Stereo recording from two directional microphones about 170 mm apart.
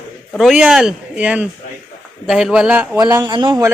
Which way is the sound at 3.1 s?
25° right (ahead or behind).